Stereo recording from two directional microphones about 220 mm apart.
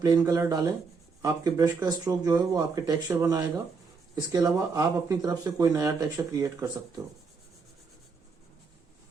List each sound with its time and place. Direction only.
0.0 s speech: 15° right (ahead or behind)